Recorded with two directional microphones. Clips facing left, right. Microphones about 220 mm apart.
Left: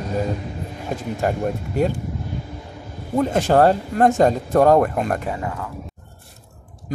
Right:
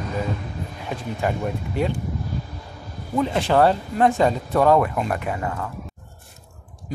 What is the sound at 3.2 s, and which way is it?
Speech, 45° left (ahead or behind).